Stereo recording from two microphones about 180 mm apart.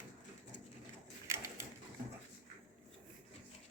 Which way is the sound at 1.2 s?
15° right (ahead or behind).